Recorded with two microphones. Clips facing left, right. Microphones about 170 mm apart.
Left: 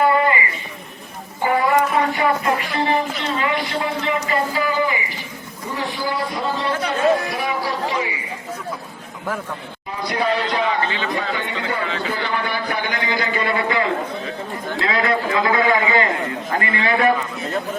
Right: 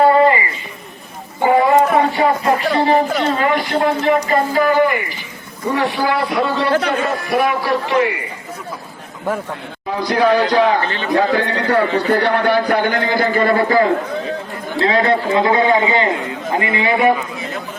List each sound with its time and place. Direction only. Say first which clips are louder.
0.0 s a sound: right 6 dB; 30° right (ahead or behind)
2.1 s music: right 4 dB; 30° right (ahead or behind)
3.2 s a man's voice: right 6 dB; 50° right (ahead or behind); by 8.2 s 65° right (ahead or behind)
10.0 s a man's voice: right 7 dB; 90° right
11.9 s a man's voice: right 9 dB; 65° right (ahead or behind); by 13.9 s 40° right (ahead or behind)
14.8 s a man's voice: right 6 dB; 30° right (ahead or behind)